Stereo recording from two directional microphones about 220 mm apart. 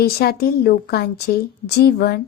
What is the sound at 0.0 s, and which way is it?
A woman's voice, 45° left (ahead or behind).